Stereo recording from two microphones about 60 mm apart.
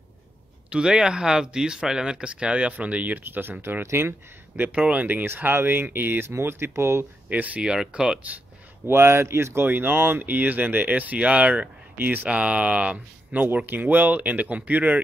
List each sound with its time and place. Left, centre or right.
0.7 s speech: centre; by 3.5 s right
3.8 s speech: right
4.7 s speech: centre
5.0 s speech: right
7.2 s speech: right
7.7 s speech: centre
8.8 s speech: right
9.7 s speech: right
12.3 s speech: right